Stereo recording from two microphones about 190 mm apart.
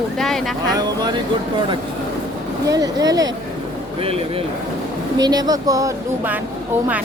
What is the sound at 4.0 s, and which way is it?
Speech, 30° right (ahead or behind).